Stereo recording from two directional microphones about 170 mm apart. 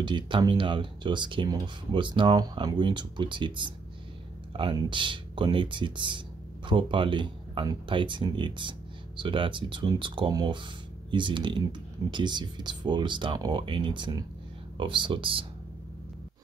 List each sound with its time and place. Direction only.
0.0 s speech: 25° right (ahead or behind)